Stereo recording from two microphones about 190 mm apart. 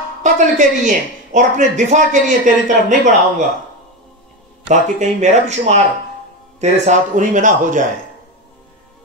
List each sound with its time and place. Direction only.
0.2 s speech: 40° right (ahead or behind)
4.6 s speech: 40° right (ahead or behind)